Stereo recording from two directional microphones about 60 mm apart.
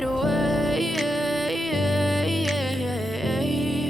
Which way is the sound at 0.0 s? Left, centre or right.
Centre.